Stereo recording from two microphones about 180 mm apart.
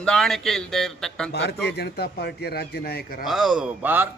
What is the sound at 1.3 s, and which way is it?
Speech, 65° left (ahead or behind).